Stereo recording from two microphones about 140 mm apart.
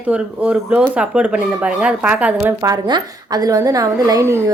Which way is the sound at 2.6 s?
30° right (ahead or behind).